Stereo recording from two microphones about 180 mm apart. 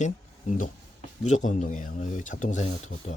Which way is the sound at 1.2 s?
45° left (ahead or behind).